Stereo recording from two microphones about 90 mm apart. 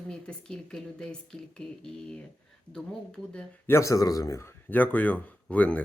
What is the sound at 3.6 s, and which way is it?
Speech, 30° left (ahead or behind).